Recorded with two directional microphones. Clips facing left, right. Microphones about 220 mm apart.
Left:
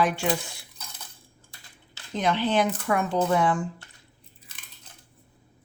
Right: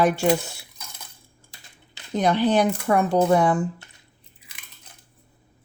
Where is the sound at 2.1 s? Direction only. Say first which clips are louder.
Right 4 dB; 40° right (ahead or behind).